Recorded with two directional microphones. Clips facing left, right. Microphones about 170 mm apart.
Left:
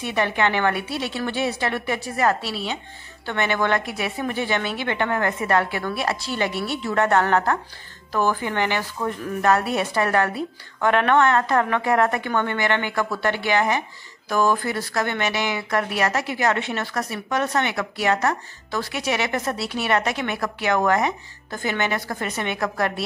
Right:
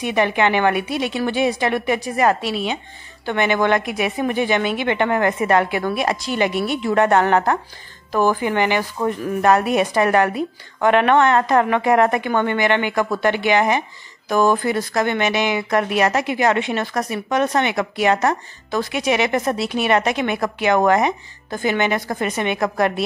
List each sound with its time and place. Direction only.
0.0 s a woman's voice: 15° right (ahead or behind)